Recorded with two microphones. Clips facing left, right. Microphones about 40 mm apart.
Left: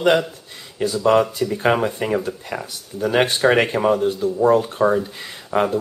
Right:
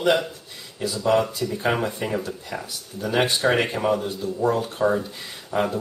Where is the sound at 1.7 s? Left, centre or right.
Left.